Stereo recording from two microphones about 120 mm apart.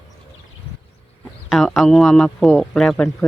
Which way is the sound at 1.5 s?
Centre (ahead or behind).